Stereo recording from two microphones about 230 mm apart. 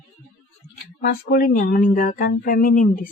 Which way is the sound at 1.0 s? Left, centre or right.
Left.